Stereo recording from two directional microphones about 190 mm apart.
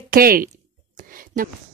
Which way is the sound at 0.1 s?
50° right (ahead or behind).